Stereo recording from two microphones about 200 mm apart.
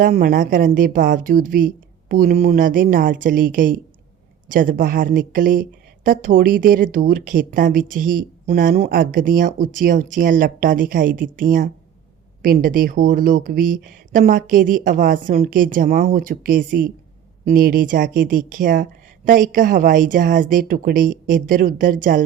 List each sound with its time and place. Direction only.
0.0 s speech: 45° right (ahead or behind)